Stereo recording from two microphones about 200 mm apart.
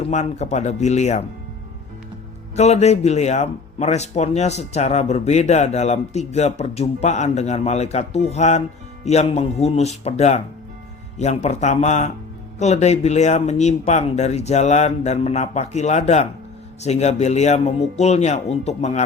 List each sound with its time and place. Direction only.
0.0 s speech: 35° left (ahead or behind)
2.6 s speech: 35° left (ahead or behind)